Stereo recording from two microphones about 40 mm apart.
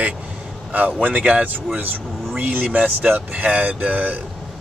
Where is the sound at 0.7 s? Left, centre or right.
Right.